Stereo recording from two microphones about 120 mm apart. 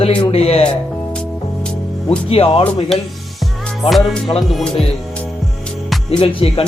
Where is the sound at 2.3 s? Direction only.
50° left (ahead or behind).